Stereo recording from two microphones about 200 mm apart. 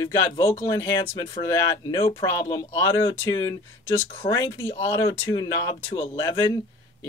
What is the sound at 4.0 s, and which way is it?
Speech, 15° left (ahead or behind).